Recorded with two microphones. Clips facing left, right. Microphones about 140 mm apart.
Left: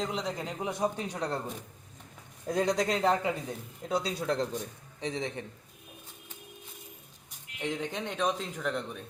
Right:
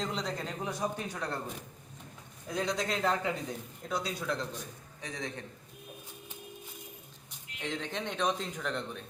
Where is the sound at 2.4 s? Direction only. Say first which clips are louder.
Left 5 dB; 45° left (ahead or behind).